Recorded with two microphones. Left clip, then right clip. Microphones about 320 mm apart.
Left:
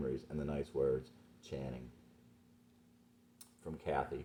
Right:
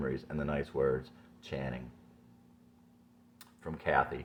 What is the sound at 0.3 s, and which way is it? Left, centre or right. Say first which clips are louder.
Speech: right 5 dB; centre.